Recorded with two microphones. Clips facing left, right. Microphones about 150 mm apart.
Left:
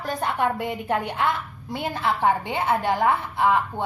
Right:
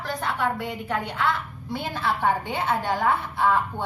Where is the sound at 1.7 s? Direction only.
20° left (ahead or behind).